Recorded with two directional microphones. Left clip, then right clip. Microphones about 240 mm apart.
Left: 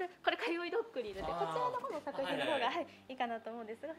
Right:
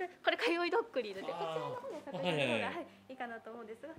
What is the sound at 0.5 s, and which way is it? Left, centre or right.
Speech, right.